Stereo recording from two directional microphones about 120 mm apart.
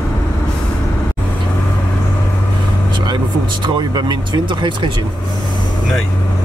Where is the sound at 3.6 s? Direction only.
40° right (ahead or behind).